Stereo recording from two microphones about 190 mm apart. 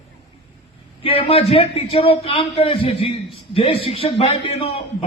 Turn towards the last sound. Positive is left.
turn(degrees=30)  # may be behind; listen again after turning